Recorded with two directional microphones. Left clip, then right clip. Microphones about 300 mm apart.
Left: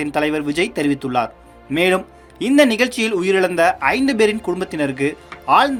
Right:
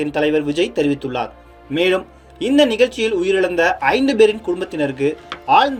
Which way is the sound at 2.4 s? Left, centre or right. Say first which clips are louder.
Left 1 dB; left.